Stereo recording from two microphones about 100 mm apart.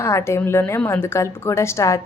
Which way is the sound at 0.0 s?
30° left (ahead or behind).